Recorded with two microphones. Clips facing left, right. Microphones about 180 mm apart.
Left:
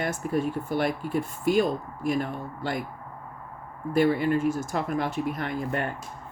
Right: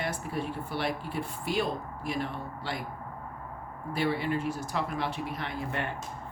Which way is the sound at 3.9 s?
45° left (ahead or behind).